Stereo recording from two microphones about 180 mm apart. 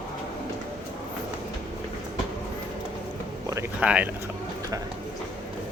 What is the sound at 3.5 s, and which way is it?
Speech, 10° right (ahead or behind).